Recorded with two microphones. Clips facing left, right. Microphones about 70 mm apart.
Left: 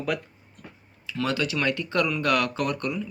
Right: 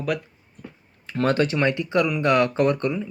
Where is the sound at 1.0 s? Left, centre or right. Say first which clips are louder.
Right 6 dB; right.